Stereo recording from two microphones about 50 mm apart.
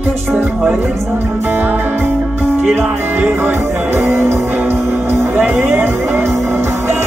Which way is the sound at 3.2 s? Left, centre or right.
Right.